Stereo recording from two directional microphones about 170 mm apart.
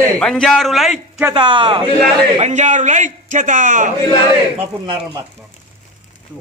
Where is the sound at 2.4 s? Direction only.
45° right (ahead or behind).